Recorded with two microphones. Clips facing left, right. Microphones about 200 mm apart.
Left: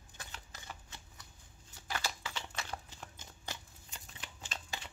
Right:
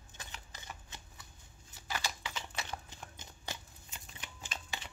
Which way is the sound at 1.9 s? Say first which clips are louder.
Even; 15° right (ahead or behind).